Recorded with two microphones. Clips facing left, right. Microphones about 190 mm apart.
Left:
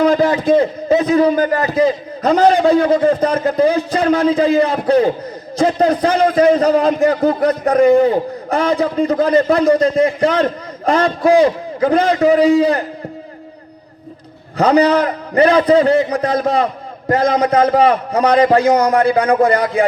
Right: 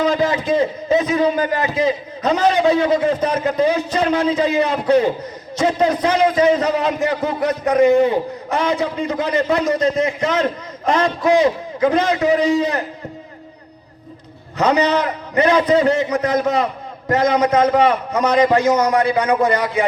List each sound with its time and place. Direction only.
0.2 s a man's voice: 35° left (ahead or behind)
14.6 s a man's voice: 35° left (ahead or behind)